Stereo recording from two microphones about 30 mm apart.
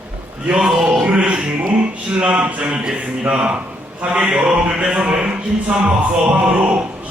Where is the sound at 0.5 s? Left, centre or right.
Right.